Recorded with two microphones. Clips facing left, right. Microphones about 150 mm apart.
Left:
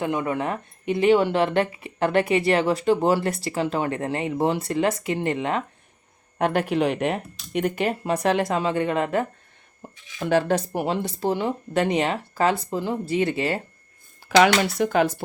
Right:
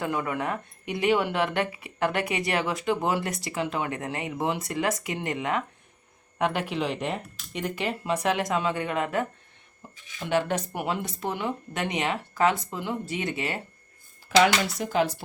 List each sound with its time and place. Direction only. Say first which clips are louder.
0.0 s speech: left 4 dB; 25° left (ahead or behind)
6.4 s speech: left 5 dB; 45° left (ahead or behind)
8.2 s speech: left 4 dB; 30° left (ahead or behind)
9.8 s speech: left 5 dB; 50° left (ahead or behind)
10.2 s speech: left 5 dB; 35° left (ahead or behind)
14.3 s speech: left 4 dB; 80° left; by 15.2 s 55° left (ahead or behind)